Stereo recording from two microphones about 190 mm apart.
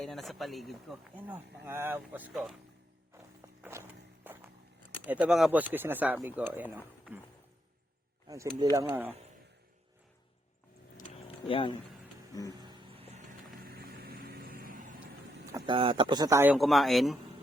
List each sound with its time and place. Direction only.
0.0 s speech: centre (ahead or behind)
3.6 s music: 10° right (ahead or behind)
5.0 s speech: 5° right (ahead or behind)
8.3 s speech: 20° right (ahead or behind)
11.4 s speech: 25° left (ahead or behind)
12.5 s vehicle: 20° right (ahead or behind)
13.6 s vehicle: 55° right (ahead or behind)
15.5 s speech: 25° right (ahead or behind)
16.6 s speech: centre (ahead or behind)